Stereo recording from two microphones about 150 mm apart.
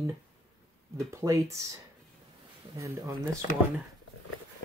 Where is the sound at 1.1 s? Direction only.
20° right (ahead or behind).